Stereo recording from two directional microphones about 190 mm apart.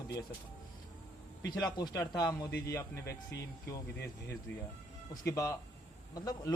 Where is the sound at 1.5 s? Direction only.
20° left (ahead or behind).